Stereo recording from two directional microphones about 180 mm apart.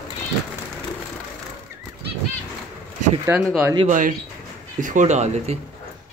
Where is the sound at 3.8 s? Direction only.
45° right (ahead or behind).